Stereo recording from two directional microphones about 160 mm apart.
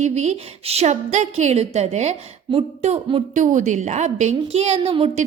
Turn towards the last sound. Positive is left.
turn(degrees=-35)  # may be behind; listen again after turning